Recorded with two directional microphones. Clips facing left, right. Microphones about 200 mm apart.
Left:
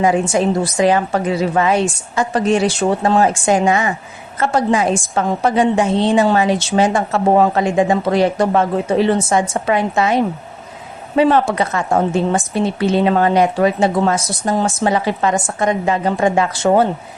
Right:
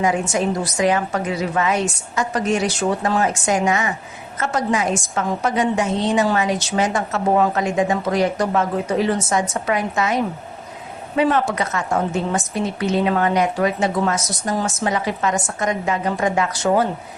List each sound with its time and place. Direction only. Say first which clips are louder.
0.0 s a woman's voice: left 5 dB; 30° left (ahead or behind)